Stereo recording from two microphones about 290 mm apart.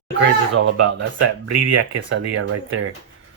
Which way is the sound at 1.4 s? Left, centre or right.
Right.